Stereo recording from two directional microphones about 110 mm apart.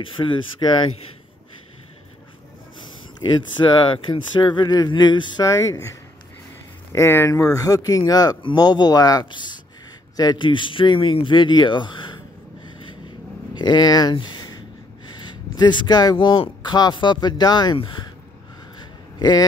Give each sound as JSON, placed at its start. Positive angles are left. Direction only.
{"t": 0.0, "sound": "speech", "side_deg": 50}
{"t": 3.8, "sound": "speech", "side_deg": 50}
{"t": 5.5, "sound": "speech", "side_deg": 30}
{"t": 6.9, "sound": "speech", "side_deg": 25}
{"t": 13.6, "sound": "speech", "side_deg": 40}
{"t": 14.1, "sound": "a sound", "side_deg": 45}
{"t": 15.1, "sound": "speech", "side_deg": 40}
{"t": 19.1, "sound": "a man's voice", "side_deg": 35}